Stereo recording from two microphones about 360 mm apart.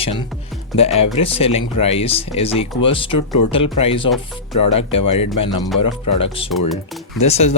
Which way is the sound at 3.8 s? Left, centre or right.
Centre.